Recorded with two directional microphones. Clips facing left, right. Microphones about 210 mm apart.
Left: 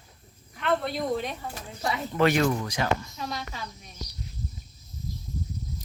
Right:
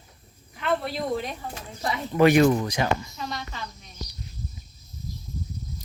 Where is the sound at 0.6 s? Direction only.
Centre (ahead or behind).